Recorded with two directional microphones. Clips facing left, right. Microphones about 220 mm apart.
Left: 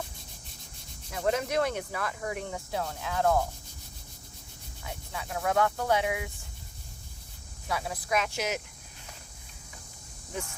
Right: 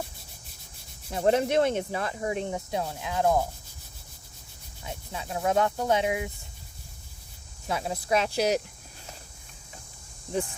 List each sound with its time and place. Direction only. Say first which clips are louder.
1.1 s speech: right 5 dB; 30° right (ahead or behind)
4.8 s speech: right 2 dB; 25° right (ahead or behind)
7.7 s speech: right 4 dB; 25° right (ahead or behind)
10.3 s speech: right 8 dB; 30° right (ahead or behind)